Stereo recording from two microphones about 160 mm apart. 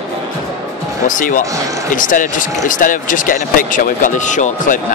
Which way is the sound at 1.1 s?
55° left (ahead or behind).